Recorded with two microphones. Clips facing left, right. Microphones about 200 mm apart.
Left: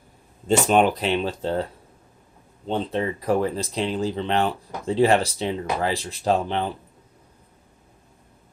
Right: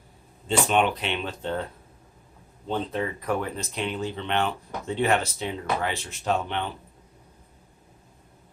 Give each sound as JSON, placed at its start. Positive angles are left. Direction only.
{"t": 0.6, "sound": "speech", "side_deg": 40}
{"t": 2.6, "sound": "speech", "side_deg": 25}